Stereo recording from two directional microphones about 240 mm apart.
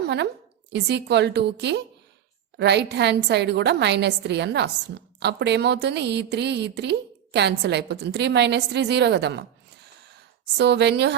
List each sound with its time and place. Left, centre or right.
0.7 s a woman's voice: right
10.6 s a woman's voice: right